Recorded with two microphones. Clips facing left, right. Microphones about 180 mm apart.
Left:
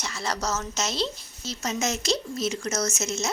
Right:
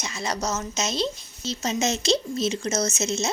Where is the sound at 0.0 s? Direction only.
20° right (ahead or behind).